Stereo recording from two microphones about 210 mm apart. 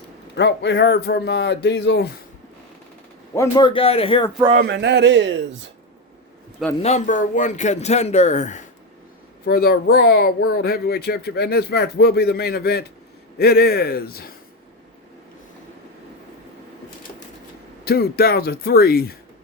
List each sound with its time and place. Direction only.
0.3 s speech: 55° left (ahead or behind)
3.3 s a man's voice: 15° left (ahead or behind)
4.5 s speech: 55° right (ahead or behind)
6.8 s a man's voice: 35° left (ahead or behind)
9.5 s speech: 45° left (ahead or behind)
17.8 s speech: 50° left (ahead or behind)